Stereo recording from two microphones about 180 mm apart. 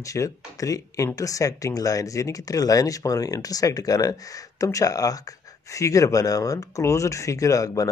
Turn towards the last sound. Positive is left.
turn(degrees=20)  # may be behind; listen again after turning